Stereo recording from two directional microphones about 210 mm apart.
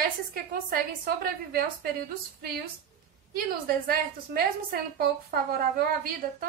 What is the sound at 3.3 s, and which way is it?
A woman's voice, 45° right (ahead or behind).